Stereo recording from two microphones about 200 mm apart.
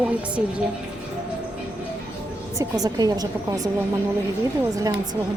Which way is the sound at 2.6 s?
20° right (ahead or behind).